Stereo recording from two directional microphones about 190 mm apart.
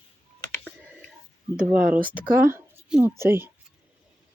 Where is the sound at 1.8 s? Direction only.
45° right (ahead or behind).